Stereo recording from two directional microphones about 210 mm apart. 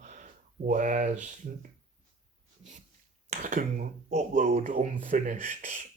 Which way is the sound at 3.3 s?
35° right (ahead or behind).